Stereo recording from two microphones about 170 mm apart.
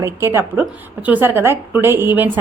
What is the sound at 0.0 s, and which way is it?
A woman's voice, 15° right (ahead or behind).